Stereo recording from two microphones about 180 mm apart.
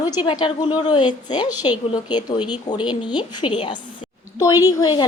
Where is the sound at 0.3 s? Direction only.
25° left (ahead or behind).